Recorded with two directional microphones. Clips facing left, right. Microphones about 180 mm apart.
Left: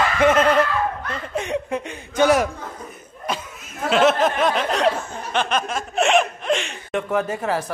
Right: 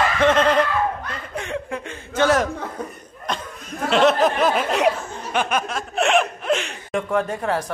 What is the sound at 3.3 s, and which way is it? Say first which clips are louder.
Snicker: even; 5° left (ahead or behind).